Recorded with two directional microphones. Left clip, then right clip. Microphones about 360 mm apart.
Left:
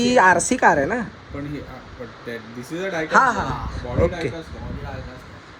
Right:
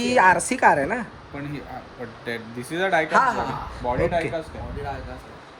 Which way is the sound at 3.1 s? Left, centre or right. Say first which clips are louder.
Left 3 dB; centre.